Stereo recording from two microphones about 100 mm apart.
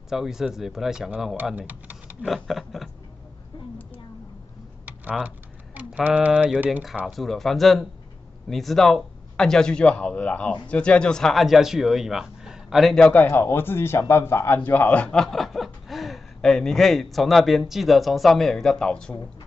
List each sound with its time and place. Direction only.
0.1 s speech: 5° right (ahead or behind)
1.3 s speech: 15° right (ahead or behind)
2.2 s speech: centre (ahead or behind)
4.8 s typing: 15° right (ahead or behind)
7.1 s speech: centre (ahead or behind)